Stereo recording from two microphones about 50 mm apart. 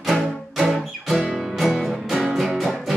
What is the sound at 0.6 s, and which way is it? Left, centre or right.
Music, centre.